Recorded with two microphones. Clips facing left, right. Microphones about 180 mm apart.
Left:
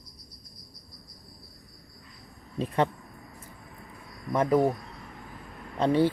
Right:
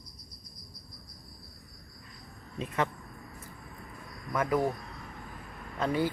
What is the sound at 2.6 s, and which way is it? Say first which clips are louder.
Speech: left 5 dB; 30° left (ahead or behind).